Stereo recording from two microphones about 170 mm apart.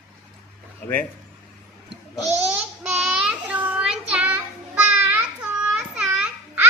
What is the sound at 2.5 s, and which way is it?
Child singing, 5° right (ahead or behind).